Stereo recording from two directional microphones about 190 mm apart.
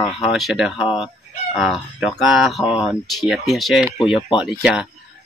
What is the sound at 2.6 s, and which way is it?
Speech, 25° left (ahead or behind).